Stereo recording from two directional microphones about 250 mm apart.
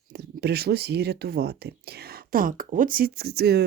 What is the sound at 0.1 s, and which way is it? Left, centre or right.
Speech, right.